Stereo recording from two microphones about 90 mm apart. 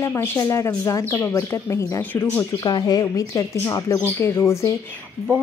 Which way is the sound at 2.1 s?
20° left (ahead or behind).